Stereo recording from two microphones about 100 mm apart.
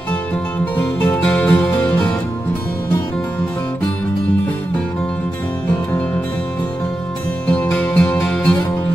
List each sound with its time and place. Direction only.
1.1 s music: 15° left (ahead or behind)
7.7 s music: 15° left (ahead or behind)